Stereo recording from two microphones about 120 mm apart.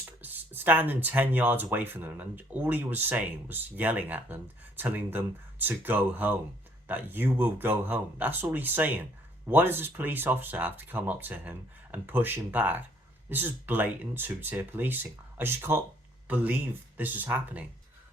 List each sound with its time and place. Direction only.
0.2 s speech: 15° right (ahead or behind)